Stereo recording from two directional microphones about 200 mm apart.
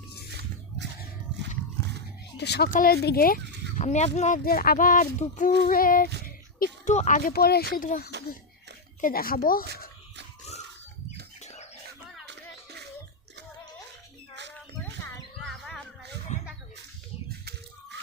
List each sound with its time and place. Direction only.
0.3 s biting: 55° right (ahead or behind)
2.4 s speech: 55° left (ahead or behind); by 4.4 s 35° left (ahead or behind)
4.4 s speech: 45° left (ahead or behind)
11.3 s bird: 35° left (ahead or behind)
14.5 s music: 5° left (ahead or behind)
16.3 s a sound: 35° left (ahead or behind)